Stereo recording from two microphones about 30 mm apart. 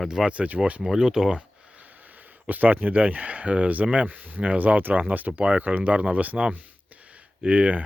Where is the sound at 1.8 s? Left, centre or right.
Right.